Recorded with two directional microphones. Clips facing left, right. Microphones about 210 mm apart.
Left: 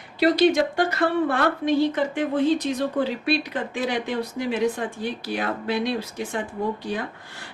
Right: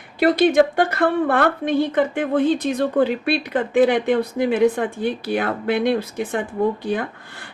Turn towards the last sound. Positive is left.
turn(degrees=-55)  # may be behind; listen again after turning